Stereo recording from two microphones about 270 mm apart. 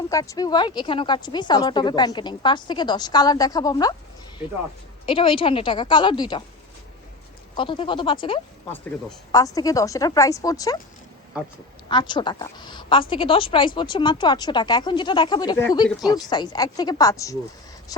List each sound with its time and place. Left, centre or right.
0.1 s a woman's voice: centre
5.0 s a woman's voice: centre
7.5 s a woman's voice: centre
8.7 s a woman's voice: centre
11.9 s a woman's voice: centre